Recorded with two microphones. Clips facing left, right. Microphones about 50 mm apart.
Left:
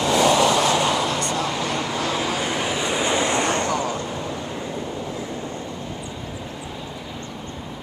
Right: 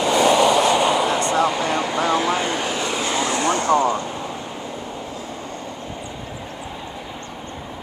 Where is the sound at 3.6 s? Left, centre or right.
Right.